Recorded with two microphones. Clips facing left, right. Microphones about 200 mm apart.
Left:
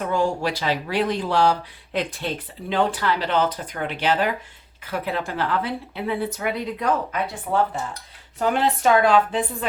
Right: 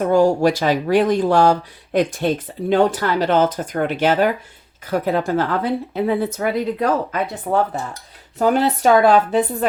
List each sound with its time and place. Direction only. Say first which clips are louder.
0.0 s speech: right 8 dB; 40° right (ahead or behind)
8.4 s a woman's voice: right 5 dB; 40° right (ahead or behind)